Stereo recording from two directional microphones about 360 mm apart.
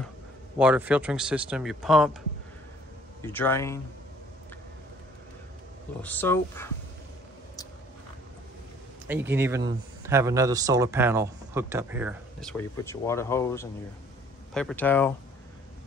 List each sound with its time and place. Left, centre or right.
0.6 s speech: centre
3.2 s speech: centre
6.0 s speech: centre
9.0 s speech: centre